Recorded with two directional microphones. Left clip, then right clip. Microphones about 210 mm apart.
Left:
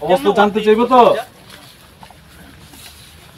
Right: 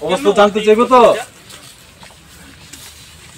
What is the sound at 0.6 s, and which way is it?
Speech, 35° left (ahead or behind).